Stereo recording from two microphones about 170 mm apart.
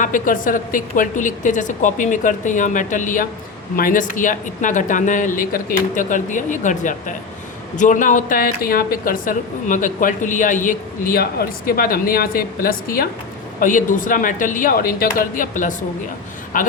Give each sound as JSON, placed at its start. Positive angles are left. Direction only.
{"t": 0.0, "sound": "a woman's voice", "side_deg": 50}